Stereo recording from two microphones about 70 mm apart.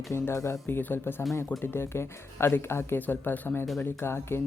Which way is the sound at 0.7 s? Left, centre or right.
Left.